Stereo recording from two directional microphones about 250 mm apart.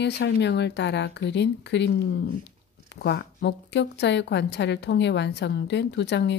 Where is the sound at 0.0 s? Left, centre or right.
Left.